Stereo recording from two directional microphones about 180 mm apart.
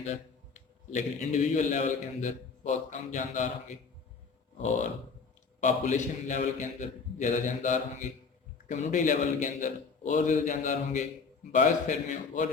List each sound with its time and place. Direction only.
0.0 s a man's voice: 40° left (ahead or behind)
5.5 s a man's voice: 40° left (ahead or behind)